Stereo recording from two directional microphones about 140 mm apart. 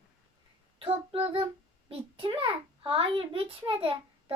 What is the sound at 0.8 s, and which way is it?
A child's voice, 40° right (ahead or behind).